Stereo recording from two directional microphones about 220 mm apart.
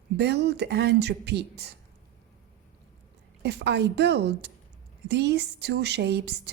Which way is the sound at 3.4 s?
50° right (ahead or behind).